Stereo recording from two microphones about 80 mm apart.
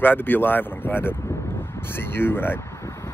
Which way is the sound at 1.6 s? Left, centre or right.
Left.